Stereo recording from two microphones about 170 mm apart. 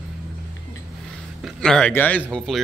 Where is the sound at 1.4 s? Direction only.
Centre (ahead or behind).